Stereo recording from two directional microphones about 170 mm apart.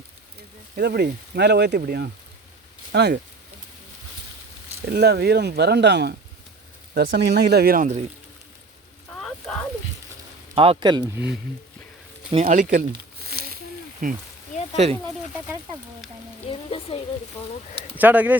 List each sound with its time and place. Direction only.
0.8 s speech: 70° right (ahead or behind)
2.9 s speech: 85° right
4.9 s speech: 75° right (ahead or behind)
9.1 s a sound: 5° left (ahead or behind)
10.5 s speech: 30° right (ahead or behind)
11.0 s speech: 10° right (ahead or behind)
12.5 s speech: 50° right (ahead or behind)
13.2 s a sound: 65° right (ahead or behind)
14.0 s speech: 50° right (ahead or behind)
14.8 s speech: 40° right (ahead or behind)
16.5 s speech: 30° left (ahead or behind)
17.9 s speech: 10° right (ahead or behind)